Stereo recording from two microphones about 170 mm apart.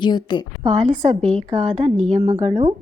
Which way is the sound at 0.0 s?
25° left (ahead or behind).